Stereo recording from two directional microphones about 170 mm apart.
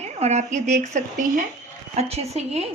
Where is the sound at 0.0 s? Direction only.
40° right (ahead or behind).